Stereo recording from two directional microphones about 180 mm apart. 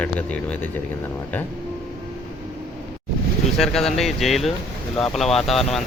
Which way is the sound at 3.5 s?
Centre (ahead or behind).